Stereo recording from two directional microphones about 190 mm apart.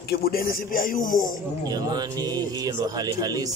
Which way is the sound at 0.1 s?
50° left (ahead or behind).